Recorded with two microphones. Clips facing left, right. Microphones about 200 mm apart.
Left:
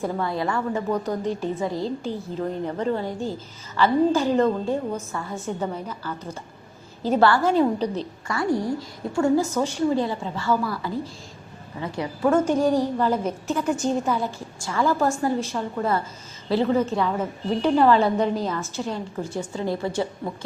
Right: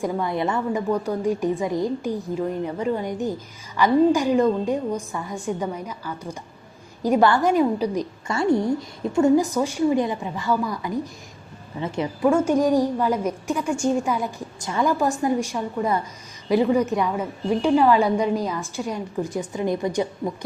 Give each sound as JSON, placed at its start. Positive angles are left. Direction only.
{"t": 0.0, "sound": "a woman's voice", "side_deg": -15}
{"t": 8.3, "sound": "a woman's voice", "side_deg": -25}
{"t": 12.3, "sound": "a woman's voice", "side_deg": -10}